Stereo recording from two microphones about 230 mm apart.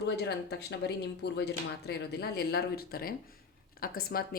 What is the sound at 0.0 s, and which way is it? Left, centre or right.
A woman's voice, left.